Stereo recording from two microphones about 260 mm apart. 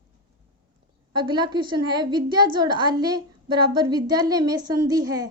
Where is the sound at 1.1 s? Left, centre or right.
Centre.